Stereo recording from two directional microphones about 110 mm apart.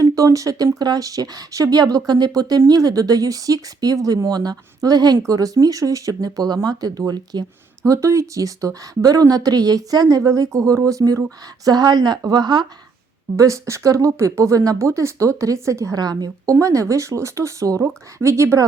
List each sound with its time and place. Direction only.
0.0 s speech: 30° right (ahead or behind)
13.3 s speech: 30° right (ahead or behind)